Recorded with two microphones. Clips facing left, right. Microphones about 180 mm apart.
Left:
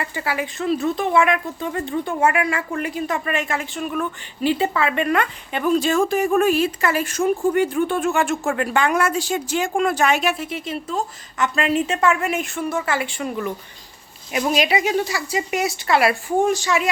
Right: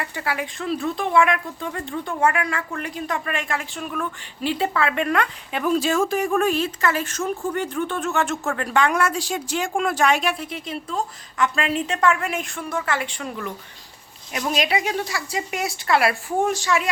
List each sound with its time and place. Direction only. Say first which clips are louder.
0.0 s speech: left 2 dB; centre (ahead or behind)